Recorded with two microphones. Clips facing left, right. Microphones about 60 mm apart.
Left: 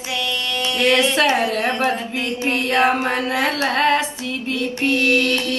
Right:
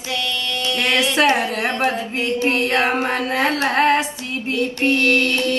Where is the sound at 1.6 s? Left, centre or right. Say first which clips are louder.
Even; right.